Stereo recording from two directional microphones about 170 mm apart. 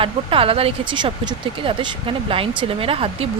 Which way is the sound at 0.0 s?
30° right (ahead or behind).